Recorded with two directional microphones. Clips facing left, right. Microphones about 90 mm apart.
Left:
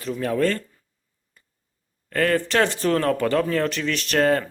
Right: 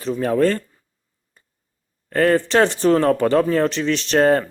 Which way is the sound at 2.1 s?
30° right (ahead or behind).